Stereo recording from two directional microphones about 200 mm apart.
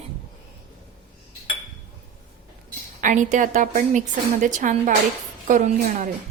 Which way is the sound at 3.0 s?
40° right (ahead or behind).